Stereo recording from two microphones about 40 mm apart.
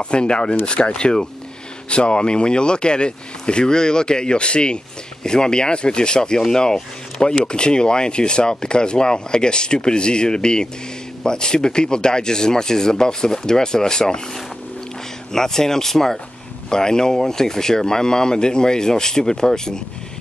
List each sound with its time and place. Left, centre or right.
0.0 s speech: left
15.3 s speech: centre